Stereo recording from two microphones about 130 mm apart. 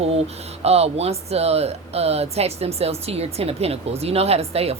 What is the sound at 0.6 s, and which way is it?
Speech, 55° right (ahead or behind).